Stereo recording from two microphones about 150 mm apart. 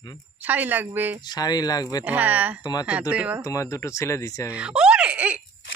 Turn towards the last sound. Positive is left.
turn(degrees=-10)  # may be behind; listen again after turning